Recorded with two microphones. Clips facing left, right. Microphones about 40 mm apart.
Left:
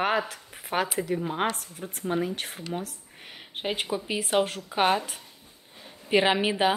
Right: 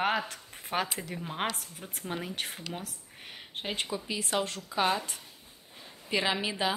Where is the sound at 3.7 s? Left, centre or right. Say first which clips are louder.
Left 5 dB; centre.